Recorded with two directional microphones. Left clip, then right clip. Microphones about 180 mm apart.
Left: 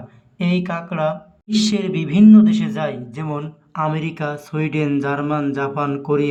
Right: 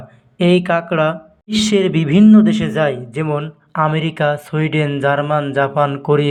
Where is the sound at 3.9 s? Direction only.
25° right (ahead or behind).